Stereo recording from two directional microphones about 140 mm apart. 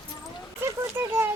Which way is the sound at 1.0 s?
15° right (ahead or behind).